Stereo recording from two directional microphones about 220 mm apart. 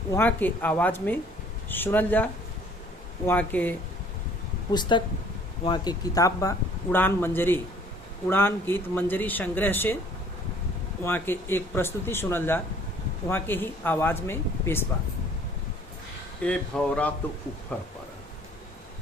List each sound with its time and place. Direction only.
0.1 s speech: 10° left (ahead or behind)
4.7 s speech: 20° left (ahead or behind)
11.0 s speech: 10° left (ahead or behind)
16.4 s speech: 5° left (ahead or behind)